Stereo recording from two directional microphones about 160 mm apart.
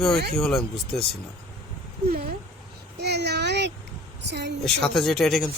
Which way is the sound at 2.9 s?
90° right.